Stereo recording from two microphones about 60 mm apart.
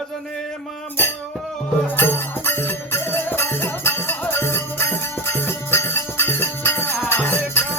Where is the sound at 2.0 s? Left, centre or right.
Left.